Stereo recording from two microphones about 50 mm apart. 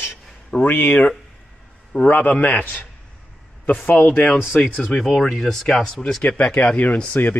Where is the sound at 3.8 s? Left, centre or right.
Left.